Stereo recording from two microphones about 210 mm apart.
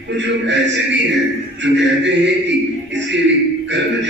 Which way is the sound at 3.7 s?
60° right (ahead or behind).